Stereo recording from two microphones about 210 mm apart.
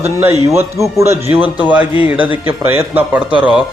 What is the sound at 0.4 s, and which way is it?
Speech, 10° right (ahead or behind).